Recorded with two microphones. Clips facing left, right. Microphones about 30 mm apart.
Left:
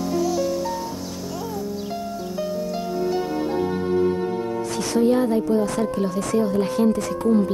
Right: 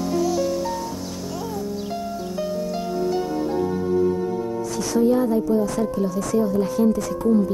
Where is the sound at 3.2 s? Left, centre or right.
Left.